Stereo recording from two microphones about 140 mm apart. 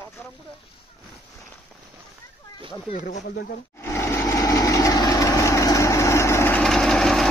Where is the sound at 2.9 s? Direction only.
90° left.